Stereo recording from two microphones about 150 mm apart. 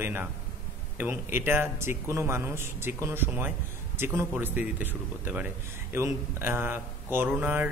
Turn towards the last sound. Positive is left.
turn(degrees=-15)  # may be behind; listen again after turning